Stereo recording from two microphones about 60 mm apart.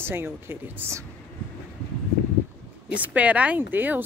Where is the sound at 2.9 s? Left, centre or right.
Right.